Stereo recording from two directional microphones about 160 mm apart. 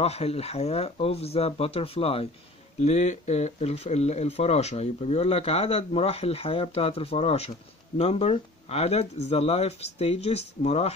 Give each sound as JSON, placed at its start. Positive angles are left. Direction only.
{"t": 0.0, "sound": "speech", "side_deg": 40}